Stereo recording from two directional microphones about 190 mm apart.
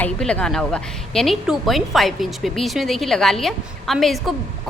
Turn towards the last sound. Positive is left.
turn(degrees=0)  # may be behind; listen again after turning